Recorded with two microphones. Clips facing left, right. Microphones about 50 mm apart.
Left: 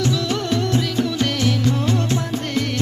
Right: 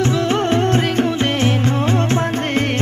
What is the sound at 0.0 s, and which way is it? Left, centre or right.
Music, right.